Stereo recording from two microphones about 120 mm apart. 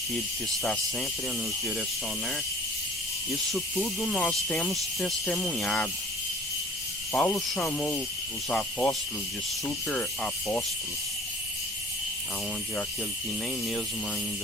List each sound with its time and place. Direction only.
0.6 s cricket: 5° left (ahead or behind)
3.5 s speech: centre (ahead or behind)
4.7 s cricket: centre (ahead or behind)
7.2 s cricket: 5° left (ahead or behind)